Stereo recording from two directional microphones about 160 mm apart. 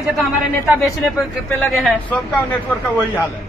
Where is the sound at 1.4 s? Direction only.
5° left (ahead or behind).